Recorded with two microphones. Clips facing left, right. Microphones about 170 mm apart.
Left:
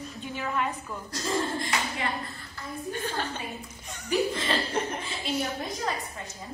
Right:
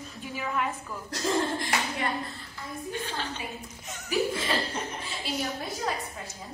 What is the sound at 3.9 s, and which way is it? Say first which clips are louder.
Chuckle: left 1 dB; 5° right (ahead or behind).